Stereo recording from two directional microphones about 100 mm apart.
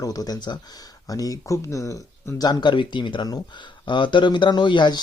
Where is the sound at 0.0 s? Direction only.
40° left (ahead or behind).